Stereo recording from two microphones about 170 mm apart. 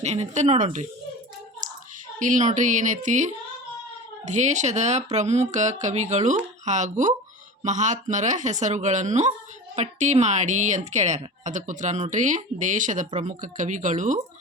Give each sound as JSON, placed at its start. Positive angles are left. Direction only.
{"t": 0.0, "sound": "a woman's voice", "side_deg": -40}
{"t": 1.6, "sound": "a sound", "side_deg": -50}
{"t": 2.1, "sound": "a woman's voice", "side_deg": -50}